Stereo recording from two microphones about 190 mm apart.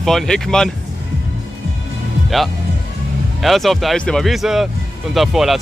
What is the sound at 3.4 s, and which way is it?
Speech, centre (ahead or behind).